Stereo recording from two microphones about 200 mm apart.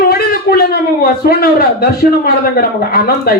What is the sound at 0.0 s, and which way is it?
A man's voice, 50° left (ahead or behind).